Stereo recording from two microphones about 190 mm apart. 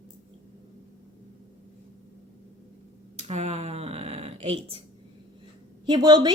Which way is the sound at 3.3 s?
35° right (ahead or behind).